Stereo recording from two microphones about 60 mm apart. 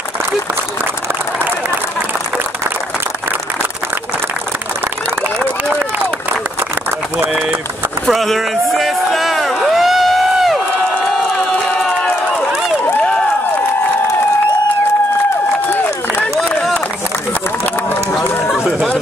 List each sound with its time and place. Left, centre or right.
5.4 s run: right
8.1 s a sound: centre
18.6 s run: centre